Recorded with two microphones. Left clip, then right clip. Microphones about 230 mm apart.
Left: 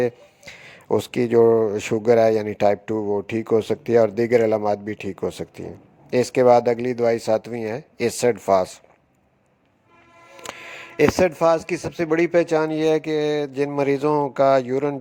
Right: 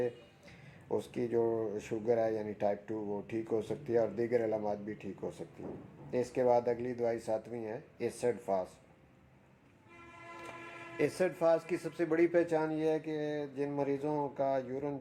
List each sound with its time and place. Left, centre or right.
0.0 s a sound: left
0.9 s a man's voice: left
10.9 s a man's voice: left